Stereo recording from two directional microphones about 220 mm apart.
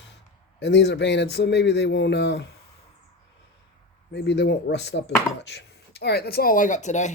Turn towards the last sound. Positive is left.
turn(degrees=30)  # may be behind; listen again after turning